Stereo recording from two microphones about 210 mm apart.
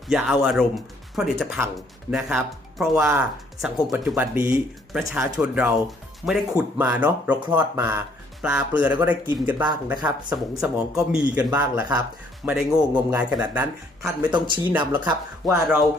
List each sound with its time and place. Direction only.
0.1 s speech: centre (ahead or behind)
14.3 s speech: 20° right (ahead or behind)
14.7 s speech: 10° right (ahead or behind)